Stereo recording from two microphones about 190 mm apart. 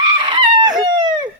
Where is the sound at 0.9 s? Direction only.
25° right (ahead or behind).